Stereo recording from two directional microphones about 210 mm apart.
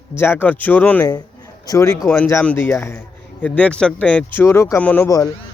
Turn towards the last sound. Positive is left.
turn(degrees=15)  # may be behind; listen again after turning